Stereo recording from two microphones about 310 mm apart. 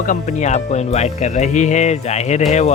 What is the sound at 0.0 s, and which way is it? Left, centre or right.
Speech, left.